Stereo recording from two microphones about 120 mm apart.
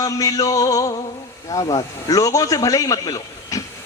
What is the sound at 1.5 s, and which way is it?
A man's voice, 35° left (ahead or behind).